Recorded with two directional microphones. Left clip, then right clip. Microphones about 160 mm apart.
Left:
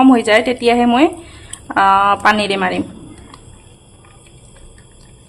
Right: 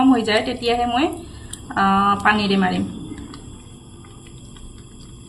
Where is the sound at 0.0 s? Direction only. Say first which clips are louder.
Left 6 dB; 90° left.